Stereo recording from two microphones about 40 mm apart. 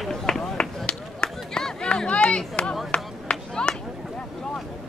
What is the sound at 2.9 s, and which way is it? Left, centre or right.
Chop, left.